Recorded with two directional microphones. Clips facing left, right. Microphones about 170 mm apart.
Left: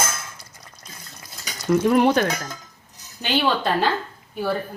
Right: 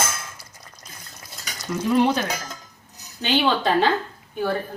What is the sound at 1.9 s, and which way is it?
Speech, 55° left (ahead or behind).